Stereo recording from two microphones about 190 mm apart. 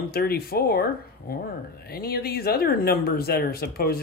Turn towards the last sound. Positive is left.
turn(degrees=55)  # may be behind; listen again after turning